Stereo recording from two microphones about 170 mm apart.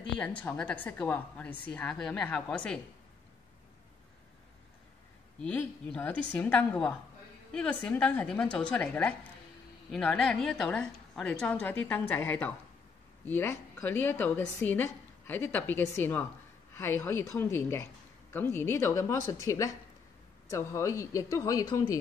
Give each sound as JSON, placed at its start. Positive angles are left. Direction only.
{"t": 0.2, "sound": "a woman's voice", "side_deg": 10}
{"t": 5.4, "sound": "a woman's voice", "side_deg": 5}